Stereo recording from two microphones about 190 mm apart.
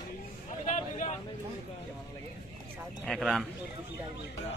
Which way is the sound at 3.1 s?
Centre (ahead or behind).